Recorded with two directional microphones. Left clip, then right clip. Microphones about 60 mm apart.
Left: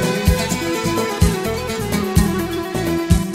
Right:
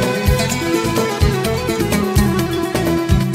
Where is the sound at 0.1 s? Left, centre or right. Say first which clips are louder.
Right 2 dB; right.